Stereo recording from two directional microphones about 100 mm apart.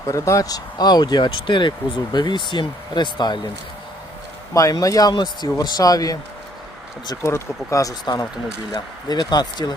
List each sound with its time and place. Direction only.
0.1 s speech: 35° left (ahead or behind); by 3.4 s 50° left (ahead or behind)
4.5 s speech: 35° left (ahead or behind)
7.2 s speech: 25° left (ahead or behind); by 9.7 s 45° left (ahead or behind)